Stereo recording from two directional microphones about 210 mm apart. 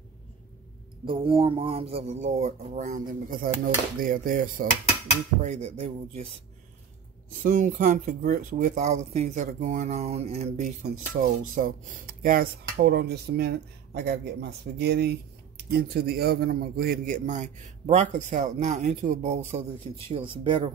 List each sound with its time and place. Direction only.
1.0 s speech: 25° right (ahead or behind)
7.4 s speech: 40° right (ahead or behind)